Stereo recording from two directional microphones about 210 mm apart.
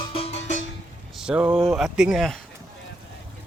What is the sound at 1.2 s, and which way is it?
Speech, 5° right (ahead or behind).